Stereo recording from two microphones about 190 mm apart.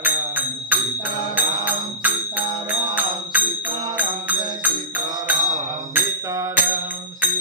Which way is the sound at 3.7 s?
25° right (ahead or behind).